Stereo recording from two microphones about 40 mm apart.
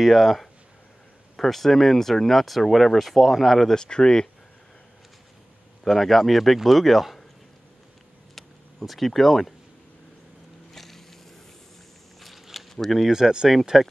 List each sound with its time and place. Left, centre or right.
0.0 s speech: centre
3.7 s speech: centre
5.9 s speech: centre
8.4 s a sound: centre
10.7 s vehicle: centre
12.2 s a sound: centre
13.1 s speech: centre
13.7 s speech: centre